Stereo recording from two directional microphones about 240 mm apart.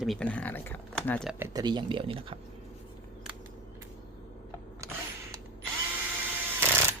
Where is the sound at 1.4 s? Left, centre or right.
Centre.